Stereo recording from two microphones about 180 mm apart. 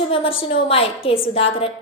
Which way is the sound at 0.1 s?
30° left (ahead or behind).